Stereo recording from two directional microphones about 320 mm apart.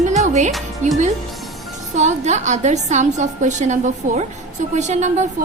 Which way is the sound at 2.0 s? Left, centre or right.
Right.